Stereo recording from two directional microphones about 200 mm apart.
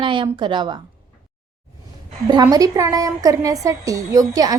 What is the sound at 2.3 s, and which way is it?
A woman's voice, 20° right (ahead or behind).